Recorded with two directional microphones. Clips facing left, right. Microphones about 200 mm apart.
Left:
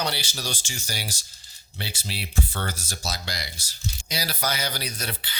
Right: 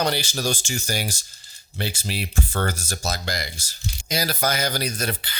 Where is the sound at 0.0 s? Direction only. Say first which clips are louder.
Right 6 dB; 45° right (ahead or behind).